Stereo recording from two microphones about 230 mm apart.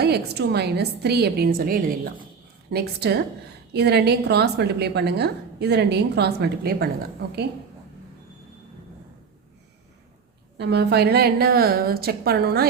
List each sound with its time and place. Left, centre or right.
0.0 s a woman's voice: right
10.6 s a woman's voice: right